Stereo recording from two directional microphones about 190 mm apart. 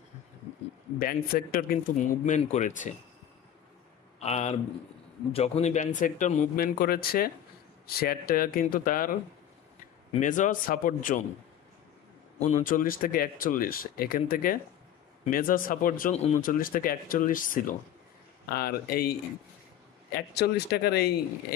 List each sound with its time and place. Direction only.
0.9 s speech: 50° left (ahead or behind)
4.2 s speech: 35° left (ahead or behind)
10.2 s speech: 40° left (ahead or behind)
12.4 s speech: 40° left (ahead or behind)
20.2 s speech: 60° left (ahead or behind)